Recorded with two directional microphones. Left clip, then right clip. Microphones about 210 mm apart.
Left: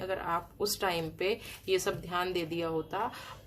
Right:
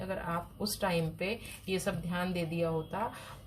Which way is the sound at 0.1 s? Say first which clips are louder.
Left 3 dB; 45° left (ahead or behind).